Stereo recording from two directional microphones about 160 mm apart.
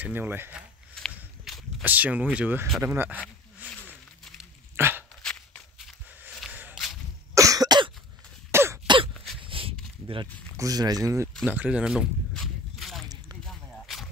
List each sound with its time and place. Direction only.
0.0 s speech: 10° right (ahead or behind)
0.9 s walk: centre (ahead or behind)
2.3 s speech: 10° right (ahead or behind)
3.6 s a sound: 5° left (ahead or behind)
4.4 s dog: 15° right (ahead or behind)
5.2 s shuffle: 5° left (ahead or behind)
6.5 s a sound: 10° right (ahead or behind)
7.3 s cough: 20° right (ahead or behind)
8.5 s throat clearing: 15° right (ahead or behind)
8.8 s throat clearing: 30° right (ahead or behind)
9.4 s walk: 35° right (ahead or behind)
10.6 s speech: 25° right (ahead or behind)
11.4 s a sound: 10° right (ahead or behind)